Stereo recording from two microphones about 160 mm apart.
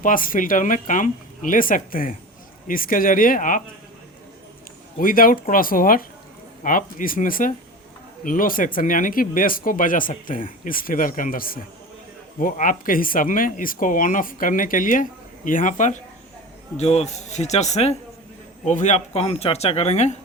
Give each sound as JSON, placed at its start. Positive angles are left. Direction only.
{"t": 0.0, "sound": "speech", "side_deg": 60}
{"t": 4.9, "sound": "speech", "side_deg": 60}